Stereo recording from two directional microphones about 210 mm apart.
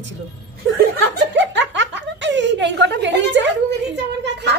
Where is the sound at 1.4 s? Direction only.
60° right (ahead or behind).